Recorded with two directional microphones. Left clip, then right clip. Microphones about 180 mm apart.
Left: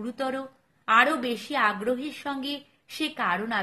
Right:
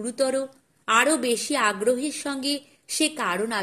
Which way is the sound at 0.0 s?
25° right (ahead or behind).